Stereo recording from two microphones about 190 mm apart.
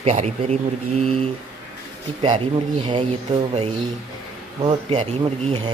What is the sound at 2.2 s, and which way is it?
Speech, 25° right (ahead or behind).